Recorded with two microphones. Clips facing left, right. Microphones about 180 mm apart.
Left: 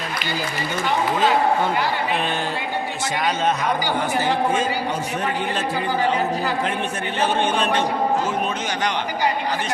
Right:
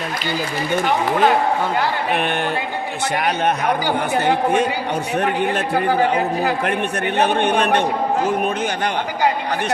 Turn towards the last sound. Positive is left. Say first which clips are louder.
# right 3 dB
turn(degrees=-60)  # may be behind; listen again after turning